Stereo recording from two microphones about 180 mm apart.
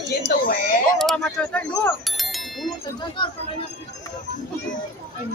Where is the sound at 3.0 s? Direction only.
25° left (ahead or behind).